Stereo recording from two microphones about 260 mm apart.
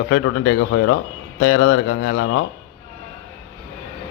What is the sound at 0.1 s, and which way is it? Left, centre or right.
A man's voice, left.